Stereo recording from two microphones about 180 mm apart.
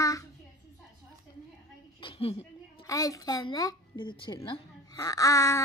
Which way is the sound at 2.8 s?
20° left (ahead or behind).